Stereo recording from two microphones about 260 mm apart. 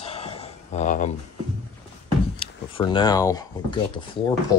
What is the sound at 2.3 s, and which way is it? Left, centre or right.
Speech, centre.